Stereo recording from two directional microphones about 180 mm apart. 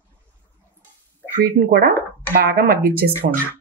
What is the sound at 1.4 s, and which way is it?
Speech, 55° right (ahead or behind).